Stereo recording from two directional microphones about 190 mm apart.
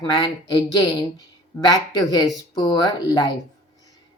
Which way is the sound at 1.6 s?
20° left (ahead or behind).